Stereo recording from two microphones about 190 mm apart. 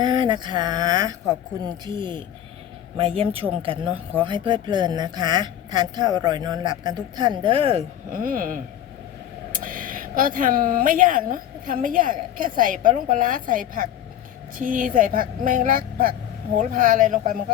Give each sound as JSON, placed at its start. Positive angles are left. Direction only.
{"t": 0.0, "sound": "speech", "side_deg": -25}
{"t": 8.1, "sound": "speech", "side_deg": -45}